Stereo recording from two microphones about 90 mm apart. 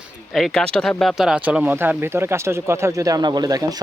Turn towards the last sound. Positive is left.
turn(degrees=-45)  # may be behind; listen again after turning